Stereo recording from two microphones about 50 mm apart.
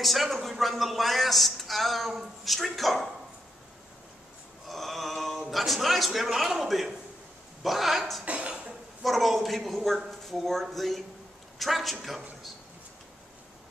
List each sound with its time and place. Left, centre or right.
0.0 s speech: centre
4.6 s mantra: centre
5.5 s speech: centre
8.3 s speech: right
9.0 s speech: centre